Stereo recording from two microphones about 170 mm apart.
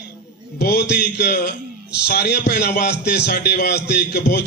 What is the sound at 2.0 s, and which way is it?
A man's voice, 75° left (ahead or behind).